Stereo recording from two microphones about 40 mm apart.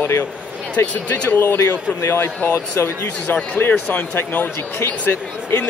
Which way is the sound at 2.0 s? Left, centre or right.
Left.